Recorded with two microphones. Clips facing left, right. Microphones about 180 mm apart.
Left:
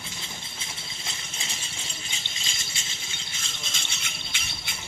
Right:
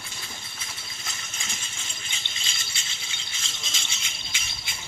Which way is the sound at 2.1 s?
40° left (ahead or behind).